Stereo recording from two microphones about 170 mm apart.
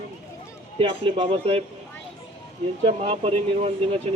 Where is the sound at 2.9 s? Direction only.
35° right (ahead or behind).